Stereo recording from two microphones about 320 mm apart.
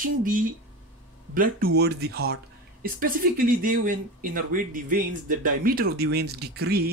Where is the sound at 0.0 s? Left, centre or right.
Right.